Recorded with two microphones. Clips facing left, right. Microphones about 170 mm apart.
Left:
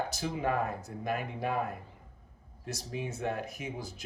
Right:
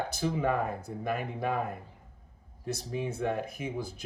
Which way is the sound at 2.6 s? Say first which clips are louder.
Right 4 dB; 55° right (ahead or behind).